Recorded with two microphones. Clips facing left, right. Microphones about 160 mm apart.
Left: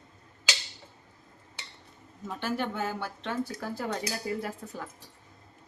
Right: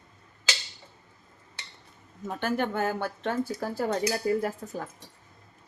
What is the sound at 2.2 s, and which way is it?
Speech, 50° right (ahead or behind).